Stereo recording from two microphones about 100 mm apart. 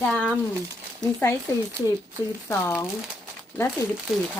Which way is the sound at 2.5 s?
30° left (ahead or behind).